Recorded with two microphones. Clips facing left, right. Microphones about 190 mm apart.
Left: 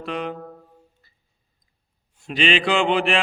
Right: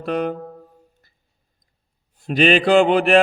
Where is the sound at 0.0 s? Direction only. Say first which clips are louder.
Right 6 dB; 45° right (ahead or behind).